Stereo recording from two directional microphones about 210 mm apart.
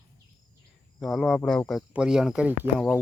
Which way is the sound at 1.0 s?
Centre (ahead or behind).